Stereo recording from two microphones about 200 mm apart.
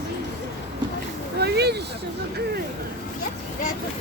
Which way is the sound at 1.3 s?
55° right (ahead or behind).